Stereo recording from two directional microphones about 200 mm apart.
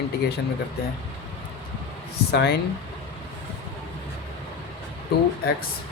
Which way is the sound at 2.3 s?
55° left (ahead or behind).